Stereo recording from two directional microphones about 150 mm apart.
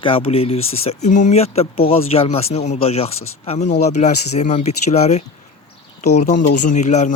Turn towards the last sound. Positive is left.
turn(degrees=55)  # may be behind; listen again after turning